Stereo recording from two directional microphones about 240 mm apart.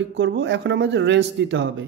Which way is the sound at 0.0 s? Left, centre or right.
Right.